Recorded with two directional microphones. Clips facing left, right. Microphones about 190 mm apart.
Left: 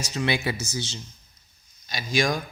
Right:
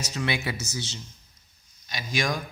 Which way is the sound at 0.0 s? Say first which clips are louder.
Left 3 dB; 30° left (ahead or behind).